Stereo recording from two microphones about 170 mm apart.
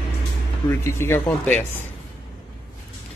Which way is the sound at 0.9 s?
15° left (ahead or behind).